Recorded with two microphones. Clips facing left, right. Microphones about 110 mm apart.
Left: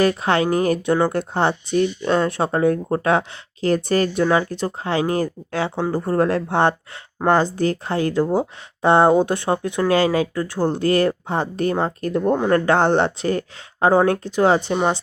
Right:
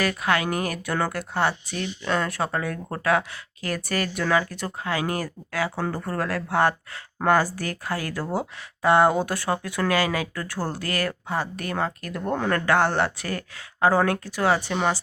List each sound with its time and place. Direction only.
0.0 s speech: 30° left (ahead or behind)